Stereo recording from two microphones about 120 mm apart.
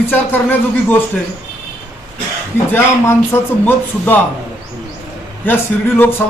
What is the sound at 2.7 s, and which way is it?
Speech, 20° left (ahead or behind).